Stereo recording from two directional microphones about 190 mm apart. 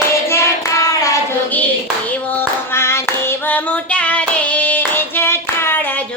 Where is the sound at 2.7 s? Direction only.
15° left (ahead or behind).